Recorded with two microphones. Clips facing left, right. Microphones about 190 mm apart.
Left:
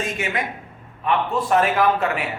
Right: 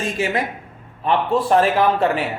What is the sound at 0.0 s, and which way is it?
A man's voice, 35° right (ahead or behind).